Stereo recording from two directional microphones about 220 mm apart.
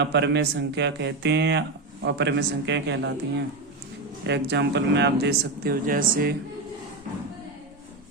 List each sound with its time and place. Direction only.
0.0 s speech: 50° right (ahead or behind)